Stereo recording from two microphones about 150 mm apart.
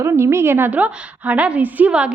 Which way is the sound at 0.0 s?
20° right (ahead or behind).